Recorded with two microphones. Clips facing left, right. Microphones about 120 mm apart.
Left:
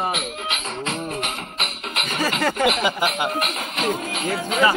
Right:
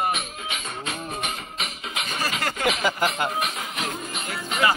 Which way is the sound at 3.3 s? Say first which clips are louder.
Left 3 dB; 70° left (ahead or behind).